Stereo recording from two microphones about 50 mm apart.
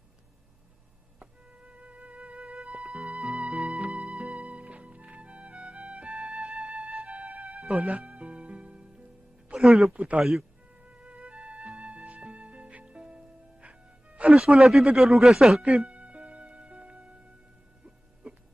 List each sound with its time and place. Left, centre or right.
1.2 s music: right
9.6 s speech: centre
9.9 s speech: right
10.8 s music: right
14.6 s speech: centre
15.6 s music: right